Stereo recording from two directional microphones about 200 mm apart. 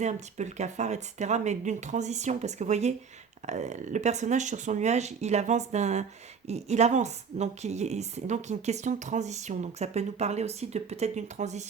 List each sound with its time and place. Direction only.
0.0 s a woman's voice: 35° right (ahead or behind)